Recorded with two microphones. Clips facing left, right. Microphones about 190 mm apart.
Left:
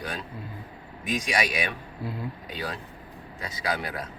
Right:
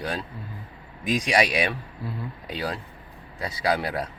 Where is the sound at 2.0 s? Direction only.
15° left (ahead or behind).